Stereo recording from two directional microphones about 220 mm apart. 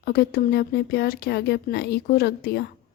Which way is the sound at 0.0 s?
45° left (ahead or behind).